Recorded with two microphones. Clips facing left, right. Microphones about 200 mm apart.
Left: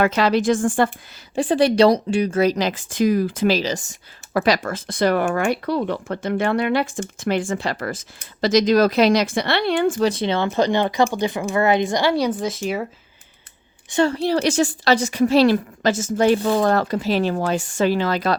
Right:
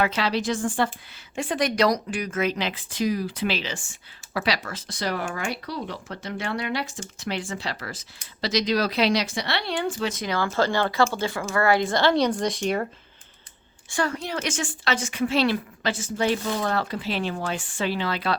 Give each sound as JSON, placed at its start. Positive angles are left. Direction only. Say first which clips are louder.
{"t": 0.0, "sound": "speech", "louder": "left 7 dB", "side_deg": 50}
{"t": 1.4, "sound": "a woman's voice", "louder": "left 8 dB", "side_deg": 30}
{"t": 10.1, "sound": "speech", "louder": "left 6 dB", "side_deg": 30}
{"t": 13.9, "sound": "a woman's voice", "louder": "left 9 dB", "side_deg": 30}